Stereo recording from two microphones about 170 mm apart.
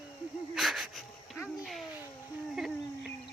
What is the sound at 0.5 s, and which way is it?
Speech, centre (ahead or behind).